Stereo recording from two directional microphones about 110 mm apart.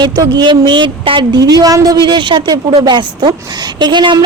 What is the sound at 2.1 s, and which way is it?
A woman's voice, 45° right (ahead or behind).